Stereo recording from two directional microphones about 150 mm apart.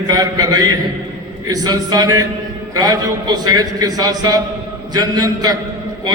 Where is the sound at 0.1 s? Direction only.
25° right (ahead or behind).